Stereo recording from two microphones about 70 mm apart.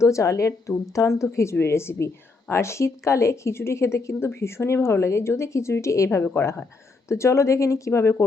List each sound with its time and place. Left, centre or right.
0.0 s speech: left